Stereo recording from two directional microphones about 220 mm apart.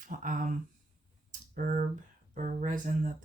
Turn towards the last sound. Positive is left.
turn(degrees=-35)  # may be behind; listen again after turning